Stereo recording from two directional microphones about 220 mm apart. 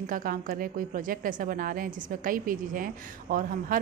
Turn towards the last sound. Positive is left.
turn(degrees=-40)  # may be behind; listen again after turning